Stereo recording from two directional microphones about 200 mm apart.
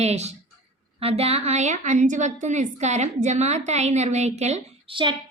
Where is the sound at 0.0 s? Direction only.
35° right (ahead or behind).